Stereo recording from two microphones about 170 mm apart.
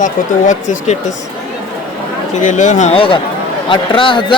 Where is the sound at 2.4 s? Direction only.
45° left (ahead or behind).